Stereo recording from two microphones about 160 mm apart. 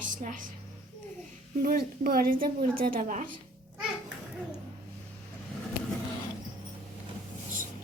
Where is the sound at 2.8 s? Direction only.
60° right (ahead or behind).